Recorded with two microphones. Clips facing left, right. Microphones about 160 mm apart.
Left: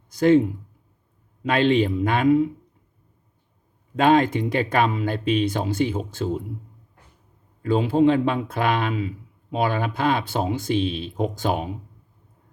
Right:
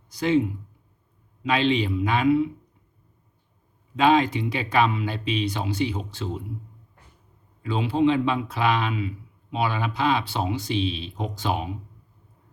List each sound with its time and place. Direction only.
0.1 s a man's voice: 50° left (ahead or behind)
3.9 s a man's voice: 50° left (ahead or behind)
7.6 s a man's voice: 50° left (ahead or behind)